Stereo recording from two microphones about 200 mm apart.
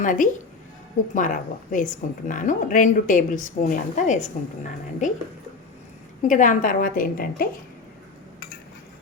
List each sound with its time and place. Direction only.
0.0 s a woman's voice: 40° left (ahead or behind)
6.2 s a woman's voice: 40° left (ahead or behind)